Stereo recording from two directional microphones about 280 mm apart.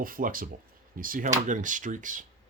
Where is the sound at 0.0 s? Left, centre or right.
Right.